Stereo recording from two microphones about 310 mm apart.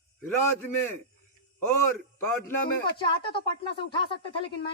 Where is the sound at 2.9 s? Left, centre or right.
Centre.